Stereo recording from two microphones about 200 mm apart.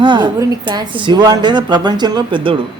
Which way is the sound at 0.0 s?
20° right (ahead or behind).